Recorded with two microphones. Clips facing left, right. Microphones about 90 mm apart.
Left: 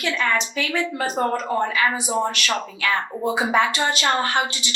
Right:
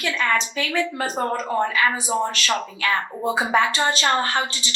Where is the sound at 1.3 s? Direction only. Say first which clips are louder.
Left 1 dB; 35° right (ahead or behind).